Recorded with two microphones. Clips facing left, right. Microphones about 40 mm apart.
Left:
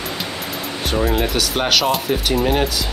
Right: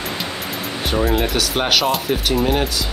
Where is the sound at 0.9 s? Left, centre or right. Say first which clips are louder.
Even; centre.